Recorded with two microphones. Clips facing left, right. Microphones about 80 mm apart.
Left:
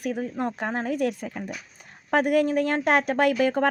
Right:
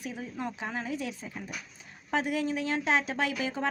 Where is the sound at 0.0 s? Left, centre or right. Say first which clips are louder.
Left 8 dB; left.